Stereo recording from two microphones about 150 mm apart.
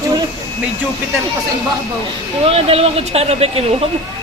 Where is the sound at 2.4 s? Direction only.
40° right (ahead or behind).